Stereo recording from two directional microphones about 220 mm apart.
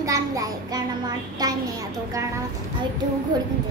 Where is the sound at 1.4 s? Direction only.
15° right (ahead or behind).